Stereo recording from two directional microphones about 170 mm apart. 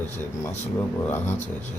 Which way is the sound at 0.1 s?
10° left (ahead or behind).